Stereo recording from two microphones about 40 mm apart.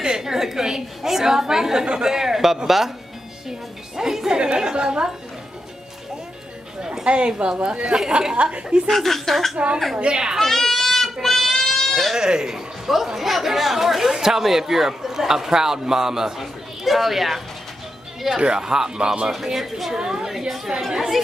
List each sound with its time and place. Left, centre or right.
0.0 s a woman's voice: centre
6.8 s a woman's voice: centre
8.8 s a woman's voice: centre
9.9 s a woman's voice: right
10.4 s goat: centre
12.1 s speech: centre
16.8 s a woman's voice: centre
18.3 s speech: centre